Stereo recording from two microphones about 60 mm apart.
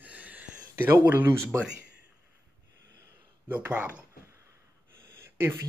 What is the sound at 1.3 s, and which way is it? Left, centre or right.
Speech, right.